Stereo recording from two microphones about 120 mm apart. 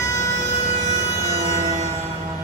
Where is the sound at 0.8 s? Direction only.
30° left (ahead or behind).